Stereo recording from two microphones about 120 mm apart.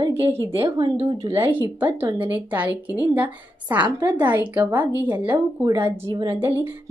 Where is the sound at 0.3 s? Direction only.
20° right (ahead or behind).